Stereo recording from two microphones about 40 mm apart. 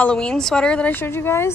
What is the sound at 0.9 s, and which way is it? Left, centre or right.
Speech, left.